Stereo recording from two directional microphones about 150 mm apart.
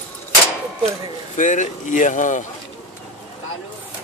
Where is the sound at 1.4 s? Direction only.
55° left (ahead or behind).